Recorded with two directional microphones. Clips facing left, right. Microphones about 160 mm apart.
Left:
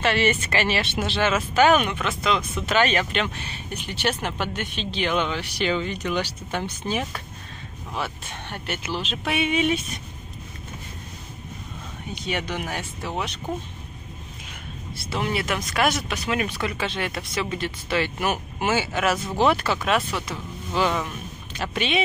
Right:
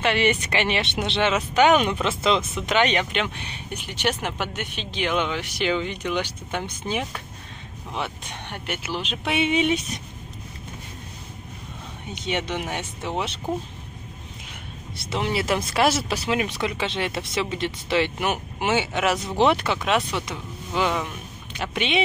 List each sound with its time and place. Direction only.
0.0 s speech: 15° right (ahead or behind)
12.1 s speech: 20° right (ahead or behind)
15.0 s speech: 25° right (ahead or behind)